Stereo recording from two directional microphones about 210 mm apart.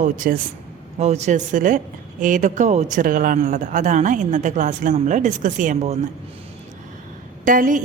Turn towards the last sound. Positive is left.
turn(degrees=-40)  # may be behind; listen again after turning